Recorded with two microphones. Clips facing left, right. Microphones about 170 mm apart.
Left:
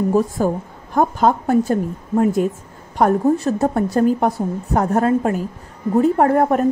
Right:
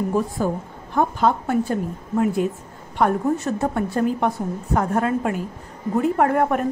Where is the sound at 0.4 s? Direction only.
45° left (ahead or behind).